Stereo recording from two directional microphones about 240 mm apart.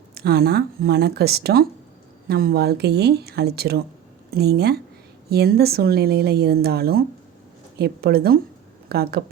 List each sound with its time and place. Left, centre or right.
0.1 s a woman's voice: right